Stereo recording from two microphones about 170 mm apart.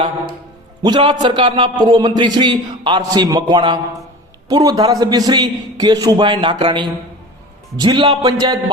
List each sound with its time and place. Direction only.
0.8 s a man's voice: 25° right (ahead or behind)